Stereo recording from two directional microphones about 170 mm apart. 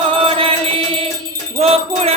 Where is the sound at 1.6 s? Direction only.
35° right (ahead or behind).